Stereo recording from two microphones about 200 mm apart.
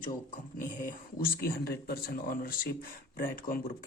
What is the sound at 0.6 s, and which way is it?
Speech, 40° left (ahead or behind).